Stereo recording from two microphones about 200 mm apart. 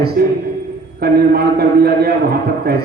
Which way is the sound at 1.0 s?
50° right (ahead or behind).